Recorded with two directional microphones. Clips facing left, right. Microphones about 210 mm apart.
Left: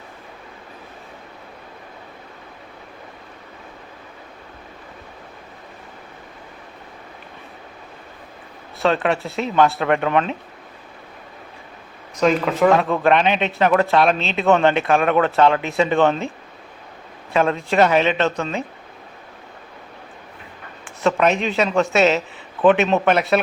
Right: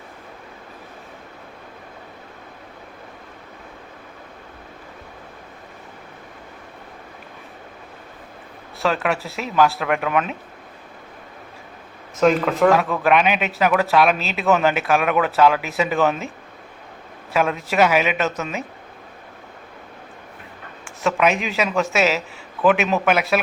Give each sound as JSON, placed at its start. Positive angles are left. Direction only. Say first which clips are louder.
{"t": 9.0, "sound": "a man's voice", "louder": "left 3 dB", "side_deg": 0}
{"t": 12.1, "sound": "a man's voice", "louder": "right 1 dB", "side_deg": 0}
{"t": 17.3, "sound": "a man's voice", "louder": "left 2 dB", "side_deg": -5}
{"t": 21.0, "sound": "a man's voice", "louder": "left 2 dB", "side_deg": 0}